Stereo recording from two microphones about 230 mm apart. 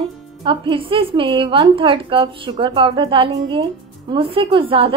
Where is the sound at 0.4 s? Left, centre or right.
Right.